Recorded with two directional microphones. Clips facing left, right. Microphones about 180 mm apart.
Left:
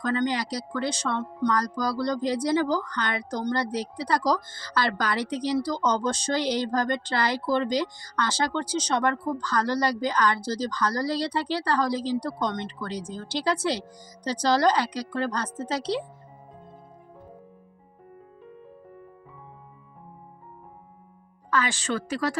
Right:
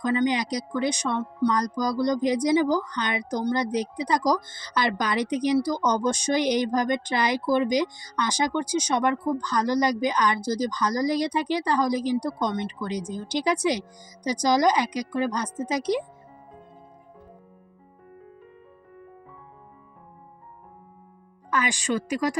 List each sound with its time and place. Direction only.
0.0 s speech: 15° right (ahead or behind)
21.5 s speech: 15° right (ahead or behind)